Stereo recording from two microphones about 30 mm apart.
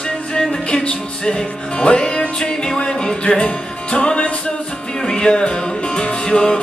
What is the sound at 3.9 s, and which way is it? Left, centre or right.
Music, left.